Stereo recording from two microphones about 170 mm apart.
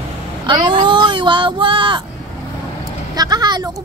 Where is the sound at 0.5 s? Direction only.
25° right (ahead or behind).